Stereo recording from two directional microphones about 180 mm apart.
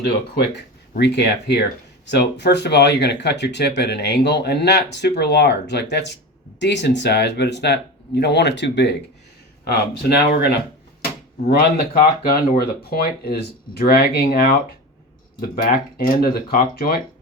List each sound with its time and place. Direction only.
0.9 s speech: 70° left (ahead or behind)
11.5 s speech: 55° left (ahead or behind)